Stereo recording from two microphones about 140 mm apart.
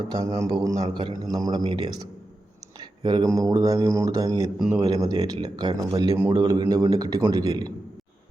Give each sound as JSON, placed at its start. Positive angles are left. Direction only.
{"t": 0.1, "sound": "speech", "side_deg": -25}
{"t": 6.3, "sound": "speech", "side_deg": -30}